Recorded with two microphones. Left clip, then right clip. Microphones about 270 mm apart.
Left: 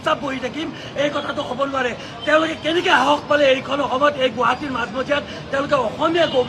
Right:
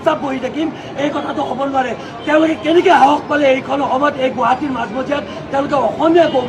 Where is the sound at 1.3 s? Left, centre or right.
Centre.